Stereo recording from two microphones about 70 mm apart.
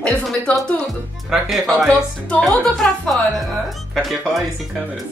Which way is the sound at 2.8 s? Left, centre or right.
Centre.